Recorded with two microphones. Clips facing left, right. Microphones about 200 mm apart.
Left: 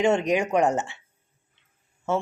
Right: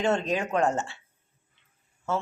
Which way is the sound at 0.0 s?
15° left (ahead or behind).